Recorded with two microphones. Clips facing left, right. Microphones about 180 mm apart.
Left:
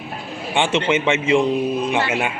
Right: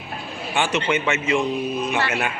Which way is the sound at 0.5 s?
25° left (ahead or behind).